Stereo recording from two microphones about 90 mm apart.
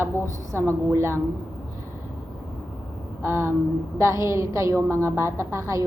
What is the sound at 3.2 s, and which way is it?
A woman's voice, 25° right (ahead or behind).